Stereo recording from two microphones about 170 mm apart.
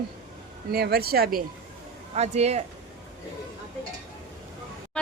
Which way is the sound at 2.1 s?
40° right (ahead or behind).